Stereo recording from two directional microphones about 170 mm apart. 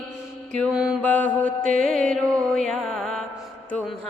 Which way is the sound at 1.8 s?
5° left (ahead or behind).